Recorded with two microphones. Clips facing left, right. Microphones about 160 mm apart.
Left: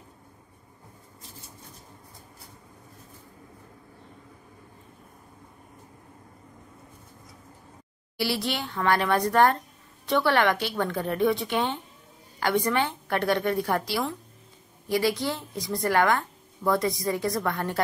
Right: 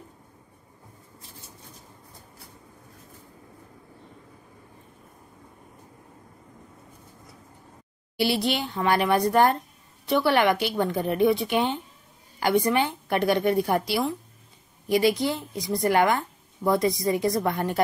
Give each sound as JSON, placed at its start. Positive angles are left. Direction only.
{"t": 8.2, "sound": "a woman's voice", "side_deg": -20}